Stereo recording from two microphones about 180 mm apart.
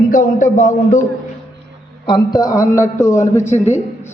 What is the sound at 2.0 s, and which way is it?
A man's voice, 20° left (ahead or behind).